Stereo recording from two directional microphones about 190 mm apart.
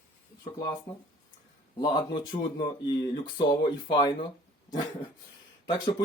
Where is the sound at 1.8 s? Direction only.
25° left (ahead or behind).